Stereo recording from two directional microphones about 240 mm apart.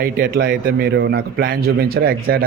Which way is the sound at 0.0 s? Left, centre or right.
Right.